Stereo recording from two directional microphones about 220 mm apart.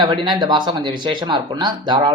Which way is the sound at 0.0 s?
20° right (ahead or behind).